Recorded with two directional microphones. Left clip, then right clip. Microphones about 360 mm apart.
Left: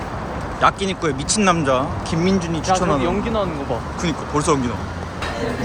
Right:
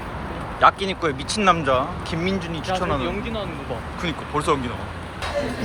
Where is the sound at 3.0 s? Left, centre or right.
Left.